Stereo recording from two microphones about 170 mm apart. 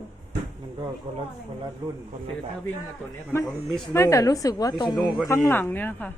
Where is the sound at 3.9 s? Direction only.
15° left (ahead or behind).